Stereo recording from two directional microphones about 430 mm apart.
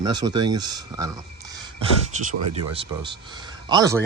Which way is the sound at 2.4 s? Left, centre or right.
Right.